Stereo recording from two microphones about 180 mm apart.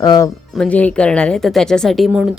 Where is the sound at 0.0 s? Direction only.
20° left (ahead or behind).